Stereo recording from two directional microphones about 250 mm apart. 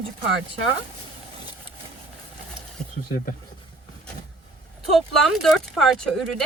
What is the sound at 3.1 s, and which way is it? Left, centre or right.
Speech, left.